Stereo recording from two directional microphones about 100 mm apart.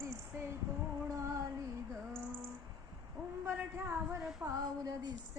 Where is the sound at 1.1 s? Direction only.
30° right (ahead or behind).